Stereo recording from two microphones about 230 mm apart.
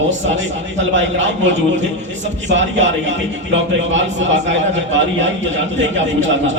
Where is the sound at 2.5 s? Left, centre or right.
Right.